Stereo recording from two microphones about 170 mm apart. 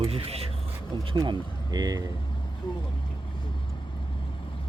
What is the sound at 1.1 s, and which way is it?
Speech, 25° right (ahead or behind).